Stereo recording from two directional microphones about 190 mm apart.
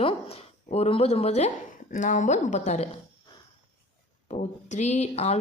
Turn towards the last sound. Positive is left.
turn(degrees=35)  # may be behind; listen again after turning